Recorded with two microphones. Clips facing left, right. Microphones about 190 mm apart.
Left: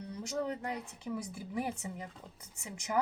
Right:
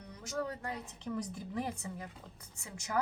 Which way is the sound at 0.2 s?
25° left (ahead or behind).